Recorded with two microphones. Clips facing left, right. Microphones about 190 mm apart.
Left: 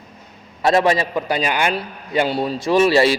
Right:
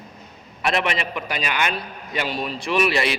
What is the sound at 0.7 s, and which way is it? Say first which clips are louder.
A man's voice: left 8 dB; 25° left (ahead or behind).